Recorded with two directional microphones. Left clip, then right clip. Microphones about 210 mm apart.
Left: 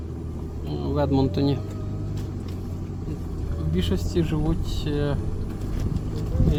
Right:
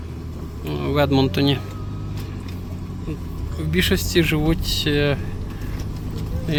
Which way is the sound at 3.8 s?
15° right (ahead or behind).